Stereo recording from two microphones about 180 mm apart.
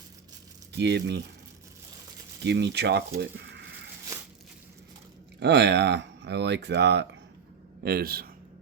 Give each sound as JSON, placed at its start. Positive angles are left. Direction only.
{"t": 0.7, "sound": "speech", "side_deg": -70}
{"t": 2.4, "sound": "speech", "side_deg": -70}
{"t": 4.1, "sound": "a sound", "side_deg": -15}
{"t": 5.4, "sound": "speech", "side_deg": -70}
{"t": 7.9, "sound": "a man's voice", "side_deg": -55}